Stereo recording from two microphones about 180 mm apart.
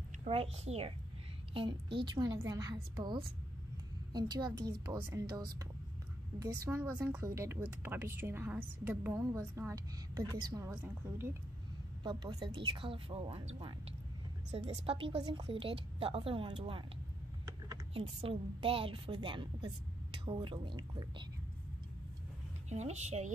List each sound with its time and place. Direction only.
0.2 s a child's voice: 35° right (ahead or behind)
12.0 s a woman's voice: 20° right (ahead or behind)
17.9 s a woman's voice: 30° right (ahead or behind)
22.7 s a child's voice: 40° right (ahead or behind)